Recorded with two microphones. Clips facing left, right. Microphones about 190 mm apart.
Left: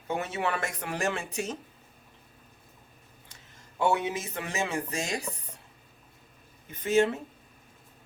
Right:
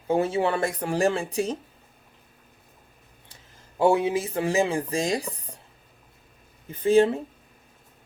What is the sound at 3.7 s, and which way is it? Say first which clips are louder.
Speech: right 6 dB; 30° right (ahead or behind).